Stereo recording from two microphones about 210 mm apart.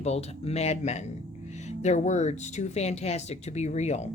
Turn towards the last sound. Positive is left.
turn(degrees=30)  # may be behind; listen again after turning